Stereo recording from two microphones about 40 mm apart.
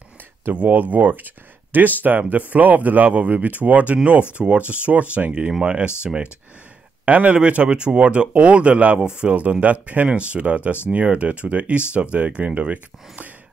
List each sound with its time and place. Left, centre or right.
0.5 s speech: right
7.1 s speech: right
9.3 s speech: right